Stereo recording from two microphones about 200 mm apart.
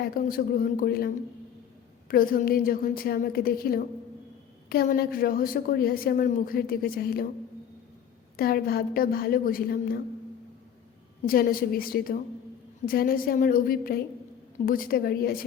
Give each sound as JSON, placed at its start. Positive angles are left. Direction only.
{"t": 0.0, "sound": "a woman's voice", "side_deg": 45}
{"t": 8.4, "sound": "a woman's voice", "side_deg": 50}
{"t": 11.3, "sound": "a woman's voice", "side_deg": 45}